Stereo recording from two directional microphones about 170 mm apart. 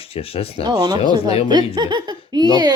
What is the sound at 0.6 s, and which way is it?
Speech, 25° right (ahead or behind).